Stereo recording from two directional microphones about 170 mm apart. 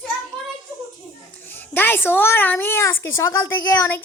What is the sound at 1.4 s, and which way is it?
A woman's voice, 10° left (ahead or behind).